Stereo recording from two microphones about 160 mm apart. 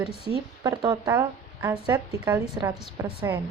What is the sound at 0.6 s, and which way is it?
Speech, 25° right (ahead or behind).